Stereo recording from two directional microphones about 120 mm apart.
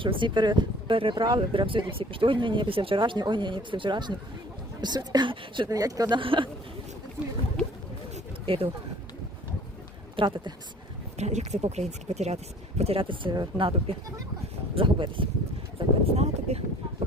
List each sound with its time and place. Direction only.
0.0 s speech: 45° right (ahead or behind)
5.6 s speech: 30° right (ahead or behind)
6.1 s speech: 45° right (ahead or behind)
8.1 s a sound: 50° right (ahead or behind)
10.2 s speech: 45° right (ahead or behind)
11.2 s speech: 70° right (ahead or behind)
12.8 s speech: 50° right (ahead or behind)
15.8 s a sound: 45° right (ahead or behind)
16.1 s a sound: 60° right (ahead or behind)